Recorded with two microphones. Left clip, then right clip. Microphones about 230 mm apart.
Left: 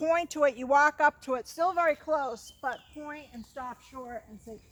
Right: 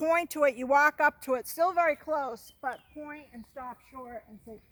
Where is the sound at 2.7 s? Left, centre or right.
Right.